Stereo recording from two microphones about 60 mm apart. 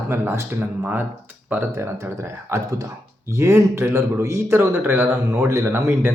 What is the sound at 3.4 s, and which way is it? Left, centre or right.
A man's voice, right.